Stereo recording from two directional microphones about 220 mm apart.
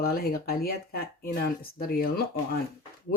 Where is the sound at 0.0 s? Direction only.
45° left (ahead or behind).